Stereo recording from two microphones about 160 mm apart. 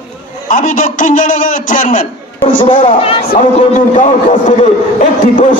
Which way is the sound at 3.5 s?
50° left (ahead or behind).